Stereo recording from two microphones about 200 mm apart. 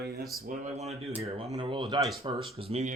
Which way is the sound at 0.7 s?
35° right (ahead or behind).